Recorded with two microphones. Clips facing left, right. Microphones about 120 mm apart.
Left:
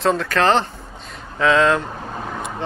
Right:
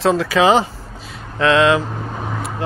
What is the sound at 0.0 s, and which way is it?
Speech, centre (ahead or behind).